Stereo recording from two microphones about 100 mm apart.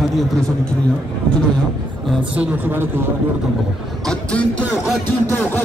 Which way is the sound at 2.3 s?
20° right (ahead or behind).